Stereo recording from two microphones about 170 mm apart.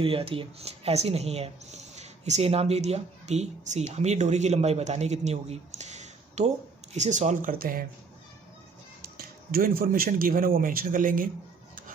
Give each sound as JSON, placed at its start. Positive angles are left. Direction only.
{"t": 0.0, "sound": "speech", "side_deg": -35}
{"t": 9.0, "sound": "speech", "side_deg": -60}